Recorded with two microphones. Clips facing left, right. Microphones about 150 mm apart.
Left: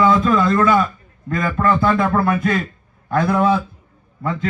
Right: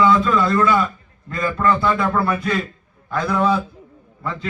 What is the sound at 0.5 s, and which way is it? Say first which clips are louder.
Speech: left 1 dB; 45° left (ahead or behind).